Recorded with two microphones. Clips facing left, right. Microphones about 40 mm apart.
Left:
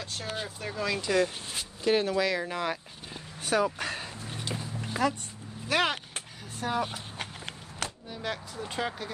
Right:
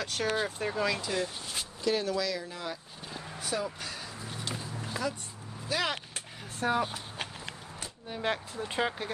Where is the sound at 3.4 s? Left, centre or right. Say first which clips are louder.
Left 7 dB; left.